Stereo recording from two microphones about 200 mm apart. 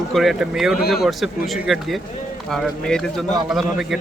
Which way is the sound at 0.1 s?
Centre (ahead or behind).